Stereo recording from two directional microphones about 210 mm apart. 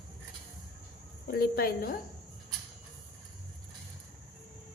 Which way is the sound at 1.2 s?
45° left (ahead or behind).